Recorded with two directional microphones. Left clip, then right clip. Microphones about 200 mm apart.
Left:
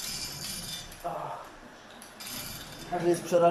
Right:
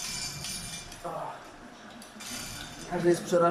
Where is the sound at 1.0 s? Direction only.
5° left (ahead or behind).